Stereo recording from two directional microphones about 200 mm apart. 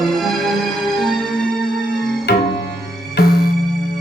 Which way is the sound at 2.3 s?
60° left (ahead or behind).